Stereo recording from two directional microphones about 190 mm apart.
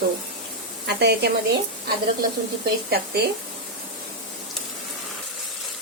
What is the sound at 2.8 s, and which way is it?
Speech, 60° right (ahead or behind).